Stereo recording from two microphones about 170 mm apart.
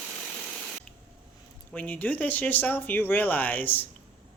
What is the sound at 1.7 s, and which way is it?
Speech, 10° left (ahead or behind).